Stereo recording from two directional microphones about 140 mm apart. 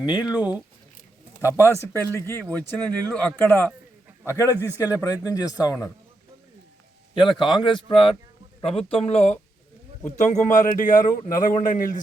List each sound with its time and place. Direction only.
0.0 s a man's voice: 30° left (ahead or behind)
0.3 s speech: 10° right (ahead or behind)
1.5 s speech: 20° left (ahead or behind)
7.1 s a man's voice: 35° left (ahead or behind)
10.2 s a man's voice: 60° left (ahead or behind)